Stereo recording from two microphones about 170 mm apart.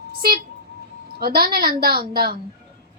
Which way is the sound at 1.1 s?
65° right (ahead or behind).